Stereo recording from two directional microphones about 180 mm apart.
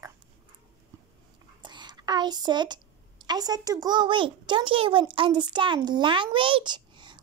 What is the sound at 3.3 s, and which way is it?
A child's voice, 20° right (ahead or behind).